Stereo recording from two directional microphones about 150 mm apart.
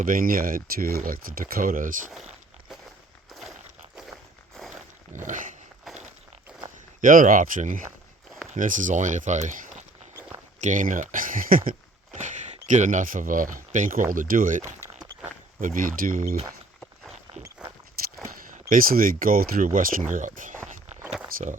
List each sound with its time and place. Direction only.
0.0 s speech: 70° right (ahead or behind)
5.1 s speech: 55° right (ahead or behind)
5.8 s walk: centre (ahead or behind)
7.0 s speech: 65° right (ahead or behind)
12.1 s speech: 55° right (ahead or behind)
15.6 s speech: 65° right (ahead or behind)
17.6 s walk: 5° right (ahead or behind)
18.0 s walk: 80° right
18.7 s speech: 70° right (ahead or behind)